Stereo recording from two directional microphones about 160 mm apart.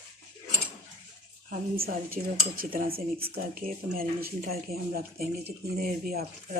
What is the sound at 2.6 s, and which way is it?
Dishes, 65° right (ahead or behind).